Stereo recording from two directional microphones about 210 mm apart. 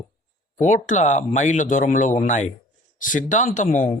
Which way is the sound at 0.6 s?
35° left (ahead or behind).